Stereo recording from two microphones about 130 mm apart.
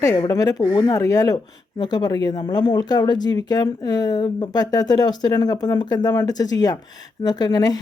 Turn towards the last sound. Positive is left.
turn(degrees=30)  # may be behind; listen again after turning